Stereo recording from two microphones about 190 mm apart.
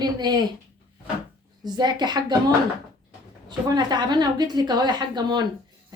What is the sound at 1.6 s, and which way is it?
Speech, 20° right (ahead or behind).